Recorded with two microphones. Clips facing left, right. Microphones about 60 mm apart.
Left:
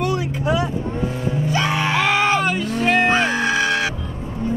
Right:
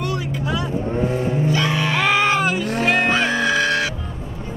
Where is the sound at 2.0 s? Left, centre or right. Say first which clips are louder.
Right 1 dB; centre.